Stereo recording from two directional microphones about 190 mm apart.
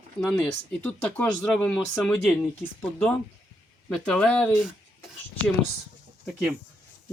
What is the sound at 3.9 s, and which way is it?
Speech, 5° left (ahead or behind).